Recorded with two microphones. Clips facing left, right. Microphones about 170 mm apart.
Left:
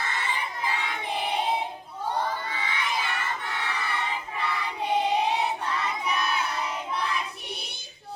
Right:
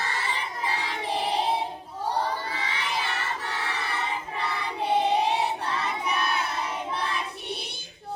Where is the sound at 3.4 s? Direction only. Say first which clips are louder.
Even; 35° right (ahead or behind).